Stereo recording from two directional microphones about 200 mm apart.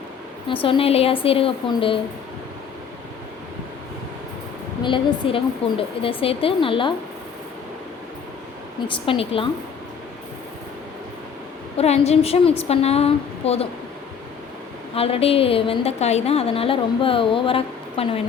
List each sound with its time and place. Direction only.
0.4 s a woman's voice: 25° left (ahead or behind)
4.8 s a woman's voice: 25° left (ahead or behind)
8.9 s a woman's voice: 25° left (ahead or behind)
11.8 s a woman's voice: 30° left (ahead or behind)
14.9 s a woman's voice: 30° left (ahead or behind)